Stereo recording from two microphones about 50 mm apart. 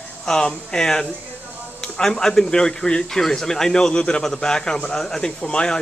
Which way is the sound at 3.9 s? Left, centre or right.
Centre.